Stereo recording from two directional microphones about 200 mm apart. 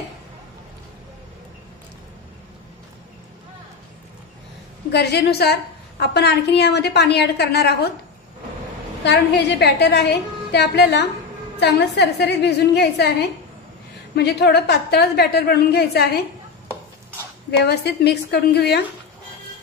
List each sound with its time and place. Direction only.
4.9 s a woman's voice: 55° left (ahead or behind)
9.0 s a woman's voice: 60° left (ahead or behind)
14.1 s a woman's voice: 55° left (ahead or behind)
17.5 s a woman's voice: 55° left (ahead or behind)